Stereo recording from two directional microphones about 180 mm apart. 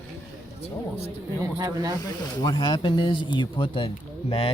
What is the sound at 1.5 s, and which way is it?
Speech, 20° right (ahead or behind).